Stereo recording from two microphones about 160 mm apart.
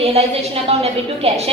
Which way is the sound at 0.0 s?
40° right (ahead or behind).